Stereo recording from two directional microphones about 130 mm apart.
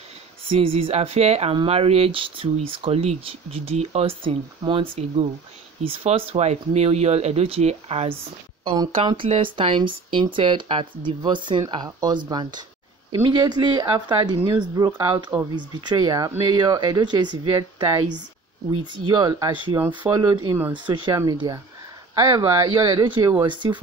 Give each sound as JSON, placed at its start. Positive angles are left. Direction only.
{"t": 0.5, "sound": "speech", "side_deg": -45}
{"t": 5.9, "sound": "speech", "side_deg": -50}
{"t": 23.4, "sound": "speech", "side_deg": -40}